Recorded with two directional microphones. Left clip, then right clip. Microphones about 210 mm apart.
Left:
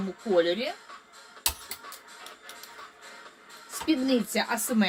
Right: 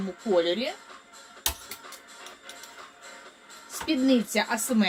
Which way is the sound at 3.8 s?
25° left (ahead or behind).